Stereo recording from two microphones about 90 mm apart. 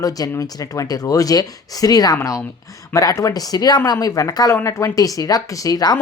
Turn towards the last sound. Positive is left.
turn(degrees=45)  # may be behind; listen again after turning